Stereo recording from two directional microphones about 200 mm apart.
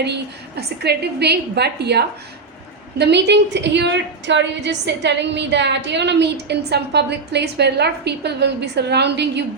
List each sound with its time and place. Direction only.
0.0 s a woman's voice: 55° right (ahead or behind)